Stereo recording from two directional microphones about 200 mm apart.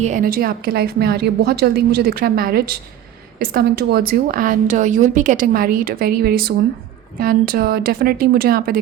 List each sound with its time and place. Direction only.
0.0 s a woman's voice: 40° right (ahead or behind)